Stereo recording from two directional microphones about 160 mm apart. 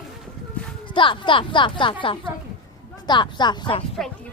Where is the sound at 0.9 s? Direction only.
30° left (ahead or behind).